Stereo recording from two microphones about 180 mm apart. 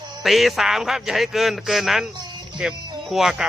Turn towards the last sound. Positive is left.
turn(degrees=0)  # may be behind; listen again after turning